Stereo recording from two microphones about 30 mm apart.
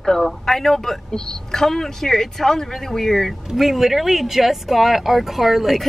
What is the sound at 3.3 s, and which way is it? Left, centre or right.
Speech, centre.